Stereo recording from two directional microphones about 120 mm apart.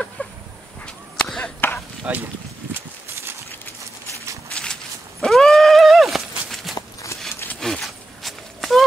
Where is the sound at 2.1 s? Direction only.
10° right (ahead or behind).